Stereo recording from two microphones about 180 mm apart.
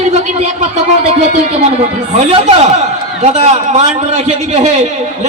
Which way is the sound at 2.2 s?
35° right (ahead or behind).